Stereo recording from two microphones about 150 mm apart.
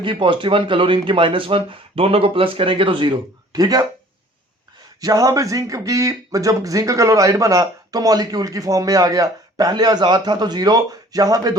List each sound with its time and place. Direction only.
0.0 s speech: 35° right (ahead or behind)
4.9 s speech: 25° right (ahead or behind)